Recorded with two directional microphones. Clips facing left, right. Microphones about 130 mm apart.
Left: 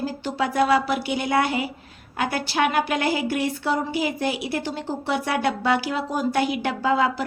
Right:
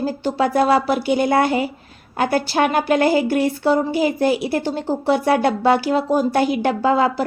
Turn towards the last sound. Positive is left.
turn(degrees=-40)  # may be behind; listen again after turning